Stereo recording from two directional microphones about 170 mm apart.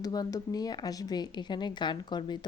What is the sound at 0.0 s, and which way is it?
Speech, 20° left (ahead or behind).